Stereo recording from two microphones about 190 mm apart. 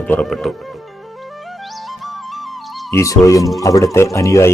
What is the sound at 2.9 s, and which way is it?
Speech, 15° left (ahead or behind).